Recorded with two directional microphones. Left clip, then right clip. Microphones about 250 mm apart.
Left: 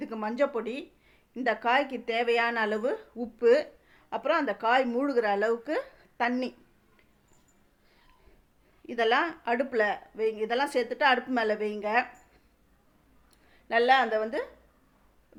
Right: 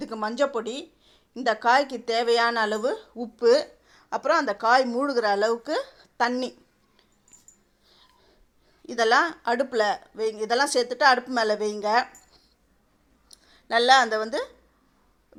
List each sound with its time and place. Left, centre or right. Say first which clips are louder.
0.0 s speech: right 3 dB; centre
8.9 s speech: right 5 dB; centre
13.7 s speech: right 4 dB; centre